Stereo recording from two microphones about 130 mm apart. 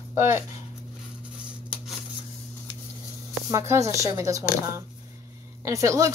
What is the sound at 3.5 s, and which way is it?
Speech, 20° right (ahead or behind).